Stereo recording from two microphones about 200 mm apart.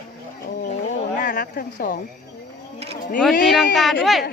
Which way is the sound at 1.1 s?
40° left (ahead or behind).